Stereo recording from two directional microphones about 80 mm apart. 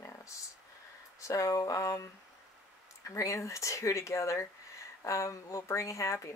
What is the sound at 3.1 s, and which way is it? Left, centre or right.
Speech, left.